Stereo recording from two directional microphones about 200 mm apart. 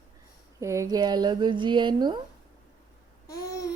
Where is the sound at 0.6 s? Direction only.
15° right (ahead or behind).